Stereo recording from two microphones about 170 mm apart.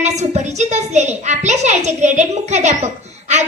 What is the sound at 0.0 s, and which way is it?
A woman's voice, 40° right (ahead or behind).